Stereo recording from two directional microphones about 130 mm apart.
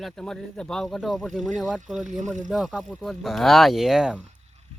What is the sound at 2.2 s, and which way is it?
Speech, 70° right (ahead or behind).